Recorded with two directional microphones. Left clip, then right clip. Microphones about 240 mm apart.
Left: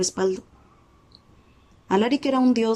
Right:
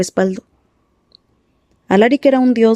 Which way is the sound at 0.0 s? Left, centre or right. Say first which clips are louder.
Right 6 dB; right.